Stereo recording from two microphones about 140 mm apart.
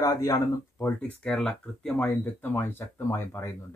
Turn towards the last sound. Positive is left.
turn(degrees=20)  # may be behind; listen again after turning